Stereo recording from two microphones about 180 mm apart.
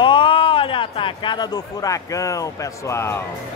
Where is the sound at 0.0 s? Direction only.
30° left (ahead or behind).